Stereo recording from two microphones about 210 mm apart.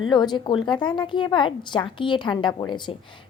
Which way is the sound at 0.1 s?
20° left (ahead or behind).